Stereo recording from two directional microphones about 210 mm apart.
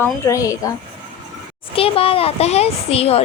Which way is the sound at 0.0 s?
15° left (ahead or behind).